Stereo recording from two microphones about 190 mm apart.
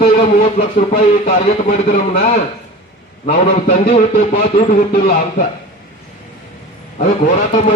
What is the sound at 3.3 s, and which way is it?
A man's voice, 45° left (ahead or behind).